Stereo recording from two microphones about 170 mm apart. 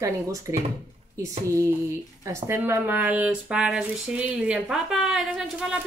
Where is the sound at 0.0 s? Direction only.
15° right (ahead or behind).